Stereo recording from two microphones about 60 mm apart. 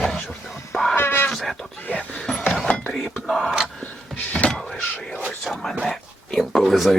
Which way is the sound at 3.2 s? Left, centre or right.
Centre.